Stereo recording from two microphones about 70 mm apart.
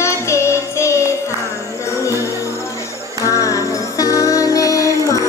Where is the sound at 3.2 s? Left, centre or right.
Left.